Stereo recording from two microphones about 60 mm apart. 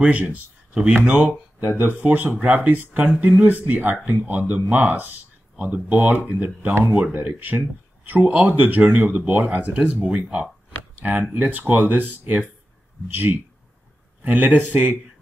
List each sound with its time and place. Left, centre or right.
0.0 s speech: right
1.8 s speech: right